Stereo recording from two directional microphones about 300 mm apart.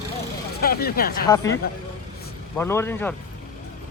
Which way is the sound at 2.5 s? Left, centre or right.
Centre.